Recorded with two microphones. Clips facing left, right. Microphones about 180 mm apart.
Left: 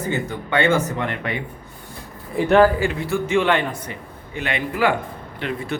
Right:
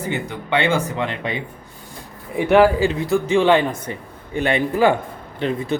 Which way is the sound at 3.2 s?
30° right (ahead or behind).